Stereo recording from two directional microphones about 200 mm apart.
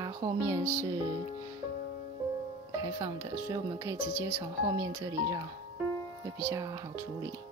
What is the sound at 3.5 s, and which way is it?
Speech, 15° right (ahead or behind).